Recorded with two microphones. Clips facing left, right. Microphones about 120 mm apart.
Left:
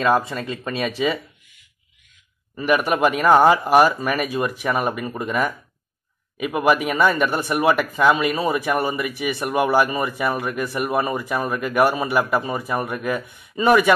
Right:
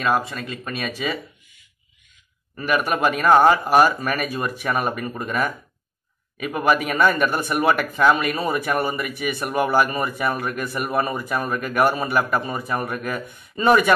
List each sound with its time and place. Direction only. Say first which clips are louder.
0.1 s speech: left 3 dB; 25° left (ahead or behind)
2.7 s speech: left 2 dB; 20° left (ahead or behind)